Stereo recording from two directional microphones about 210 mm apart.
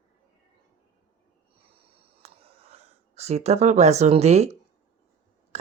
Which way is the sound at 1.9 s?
30° right (ahead or behind).